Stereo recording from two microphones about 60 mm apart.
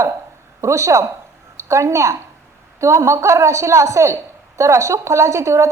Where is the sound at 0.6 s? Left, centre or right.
Right.